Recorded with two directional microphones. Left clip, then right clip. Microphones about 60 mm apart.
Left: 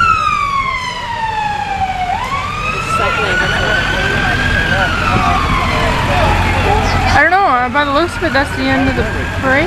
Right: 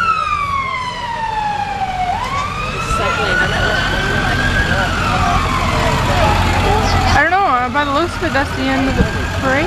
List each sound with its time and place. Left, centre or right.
3.3 s vehicle: centre
7.1 s vehicle: left